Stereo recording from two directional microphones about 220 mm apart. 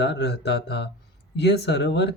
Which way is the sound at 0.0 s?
50° left (ahead or behind).